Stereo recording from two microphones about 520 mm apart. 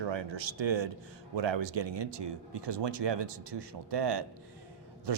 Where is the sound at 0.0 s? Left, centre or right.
Right.